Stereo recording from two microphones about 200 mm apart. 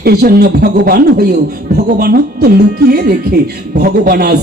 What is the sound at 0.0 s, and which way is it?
A man's voice, 50° right (ahead or behind).